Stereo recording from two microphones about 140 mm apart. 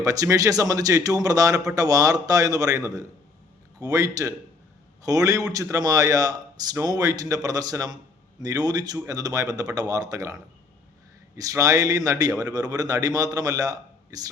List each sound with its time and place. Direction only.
0.0 s speech: 25° right (ahead or behind)